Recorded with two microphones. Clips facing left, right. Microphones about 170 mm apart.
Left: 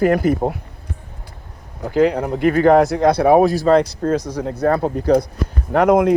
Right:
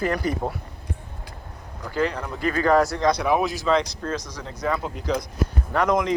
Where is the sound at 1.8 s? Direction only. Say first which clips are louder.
Left 9 dB; 55° left (ahead or behind).